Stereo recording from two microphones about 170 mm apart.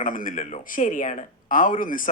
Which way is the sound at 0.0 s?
55° left (ahead or behind).